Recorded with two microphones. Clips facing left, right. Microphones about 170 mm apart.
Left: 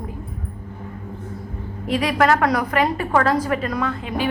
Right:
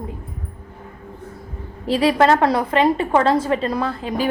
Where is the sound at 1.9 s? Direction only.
30° right (ahead or behind).